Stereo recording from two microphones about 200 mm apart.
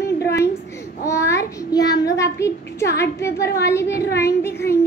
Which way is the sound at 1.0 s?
15° left (ahead or behind).